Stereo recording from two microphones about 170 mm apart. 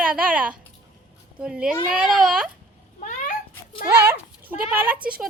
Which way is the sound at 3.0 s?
50° left (ahead or behind).